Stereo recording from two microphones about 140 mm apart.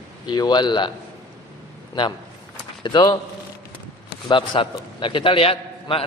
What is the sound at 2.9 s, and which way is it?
Speech, 30° left (ahead or behind).